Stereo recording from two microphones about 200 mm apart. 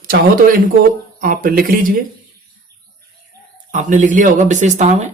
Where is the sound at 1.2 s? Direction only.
45° right (ahead or behind).